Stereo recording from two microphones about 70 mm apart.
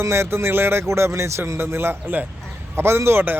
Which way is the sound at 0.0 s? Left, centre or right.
Right.